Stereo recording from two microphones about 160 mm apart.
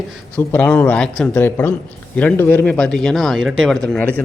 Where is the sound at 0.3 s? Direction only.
10° left (ahead or behind).